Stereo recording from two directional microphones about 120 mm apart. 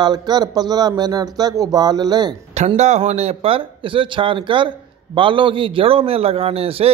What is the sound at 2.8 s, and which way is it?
Speech, 70° right (ahead or behind).